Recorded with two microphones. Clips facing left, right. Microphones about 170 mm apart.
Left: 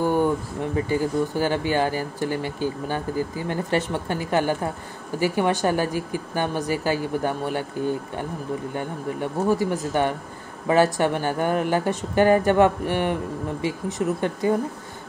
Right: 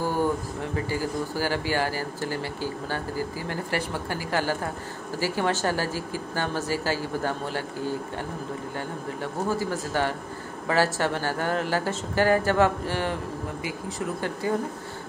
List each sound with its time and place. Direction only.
0.0 s a woman's voice: 20° left (ahead or behind)
8.7 s speech: 20° left (ahead or behind)